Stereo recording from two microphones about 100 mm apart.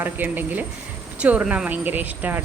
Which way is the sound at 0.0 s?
20° right (ahead or behind).